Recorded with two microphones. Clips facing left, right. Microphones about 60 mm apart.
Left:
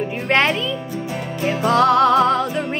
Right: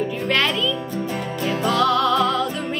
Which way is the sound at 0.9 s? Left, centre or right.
Centre.